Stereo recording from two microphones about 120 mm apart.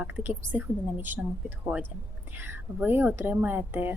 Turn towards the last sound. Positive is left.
turn(degrees=-15)  # may be behind; listen again after turning